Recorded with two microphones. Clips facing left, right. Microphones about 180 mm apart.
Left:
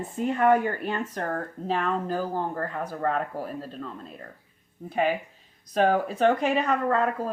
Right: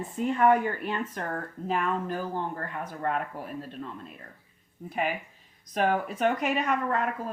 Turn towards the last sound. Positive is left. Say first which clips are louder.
# left 4 dB
turn(degrees=35)  # may be behind; listen again after turning